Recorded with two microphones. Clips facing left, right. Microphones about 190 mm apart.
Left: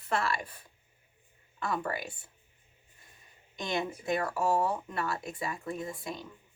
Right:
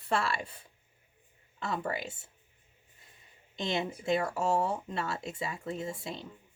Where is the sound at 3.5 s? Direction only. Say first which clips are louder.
Even; 25° right (ahead or behind).